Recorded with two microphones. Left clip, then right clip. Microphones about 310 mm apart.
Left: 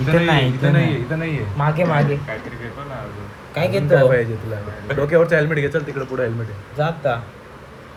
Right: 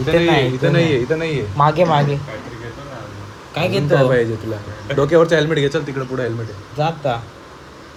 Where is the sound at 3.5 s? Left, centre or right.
Centre.